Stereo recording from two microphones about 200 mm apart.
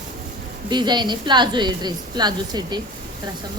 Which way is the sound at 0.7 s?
20° right (ahead or behind).